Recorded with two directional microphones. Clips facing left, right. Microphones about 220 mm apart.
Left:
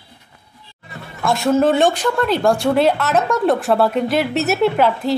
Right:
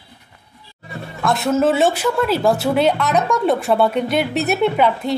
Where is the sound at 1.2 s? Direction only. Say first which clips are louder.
Left 1 dB; centre (ahead or behind).